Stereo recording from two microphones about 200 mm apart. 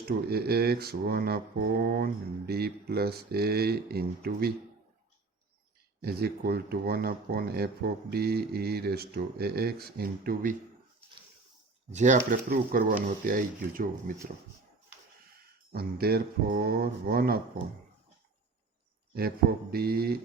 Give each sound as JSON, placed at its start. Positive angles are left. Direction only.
{"t": 0.3, "sound": "speech", "side_deg": -50}
{"t": 6.0, "sound": "speech", "side_deg": -50}
{"t": 11.9, "sound": "speech", "side_deg": -35}
{"t": 15.7, "sound": "speech", "side_deg": -50}
{"t": 19.1, "sound": "speech", "side_deg": -50}